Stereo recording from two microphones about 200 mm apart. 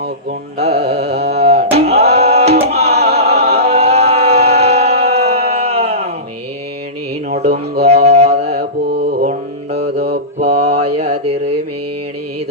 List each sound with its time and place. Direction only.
0.6 s carnatic music: 35° right (ahead or behind)
1.3 s a sound: 30° right (ahead or behind)
1.7 s music: 30° right (ahead or behind)
3.3 s a sound: 30° right (ahead or behind)
5.5 s music: 30° right (ahead or behind)
7.3 s music: 35° right (ahead or behind)
8.0 s mantra: 30° right (ahead or behind)
8.5 s mantra: 50° right (ahead or behind)
10.4 s mantra: 35° right (ahead or behind)